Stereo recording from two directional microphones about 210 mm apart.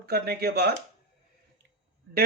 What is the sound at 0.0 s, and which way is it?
Speech, 50° right (ahead or behind).